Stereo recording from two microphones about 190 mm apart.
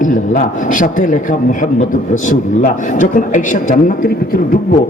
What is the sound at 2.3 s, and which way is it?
A man's voice, 45° left (ahead or behind).